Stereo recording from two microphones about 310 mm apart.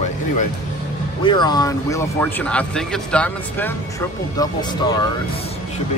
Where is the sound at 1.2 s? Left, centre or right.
Centre.